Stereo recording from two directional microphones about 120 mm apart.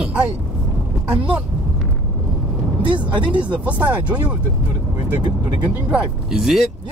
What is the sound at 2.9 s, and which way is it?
Speech, 45° right (ahead or behind).